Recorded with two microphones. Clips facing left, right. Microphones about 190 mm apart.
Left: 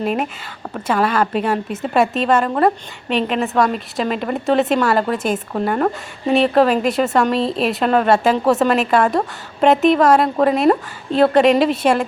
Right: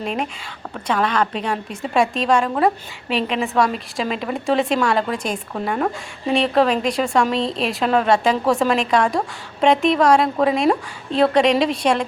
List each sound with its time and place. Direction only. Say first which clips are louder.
0.0 s a woman's voice: left 4 dB; 5° left (ahead or behind)